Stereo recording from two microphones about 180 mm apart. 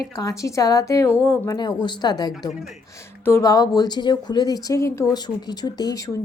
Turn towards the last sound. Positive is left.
turn(degrees=20)  # may be behind; listen again after turning